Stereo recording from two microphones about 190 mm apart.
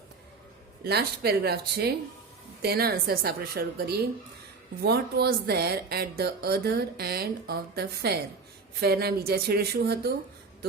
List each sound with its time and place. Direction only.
0.9 s a woman's voice: 55° right (ahead or behind)